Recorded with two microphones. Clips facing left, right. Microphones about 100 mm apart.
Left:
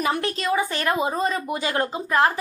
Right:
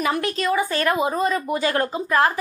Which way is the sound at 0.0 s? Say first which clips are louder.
Right 2 dB; 30° left (ahead or behind).